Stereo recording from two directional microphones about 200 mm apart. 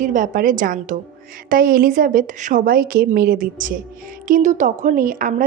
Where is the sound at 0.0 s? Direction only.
40° right (ahead or behind).